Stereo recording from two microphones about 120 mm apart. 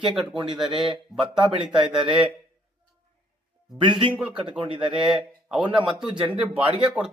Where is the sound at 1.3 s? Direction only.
40° right (ahead or behind).